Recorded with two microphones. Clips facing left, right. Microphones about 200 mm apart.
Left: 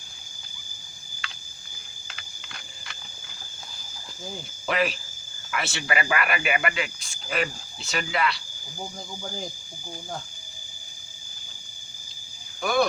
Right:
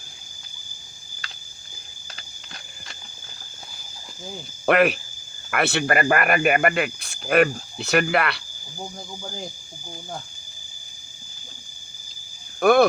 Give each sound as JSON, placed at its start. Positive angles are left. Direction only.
{"t": 1.2, "sound": "a sound", "side_deg": -40}
{"t": 4.6, "sound": "speech", "side_deg": -60}
{"t": 12.5, "sound": "speech", "side_deg": -60}